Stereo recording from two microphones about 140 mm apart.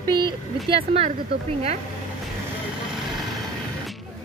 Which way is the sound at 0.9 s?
45° right (ahead or behind).